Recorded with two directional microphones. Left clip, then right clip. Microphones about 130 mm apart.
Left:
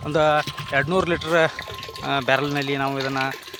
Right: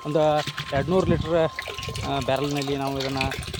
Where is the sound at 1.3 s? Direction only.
5° right (ahead or behind).